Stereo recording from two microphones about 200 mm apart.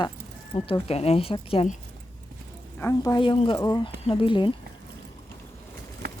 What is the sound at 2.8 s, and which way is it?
Speech, 15° left (ahead or behind).